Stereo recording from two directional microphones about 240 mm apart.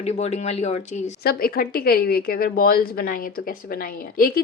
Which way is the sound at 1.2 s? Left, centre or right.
Left.